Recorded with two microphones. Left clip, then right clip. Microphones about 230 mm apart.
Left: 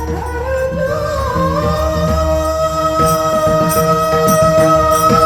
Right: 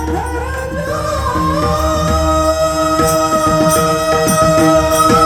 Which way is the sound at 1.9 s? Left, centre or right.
Right.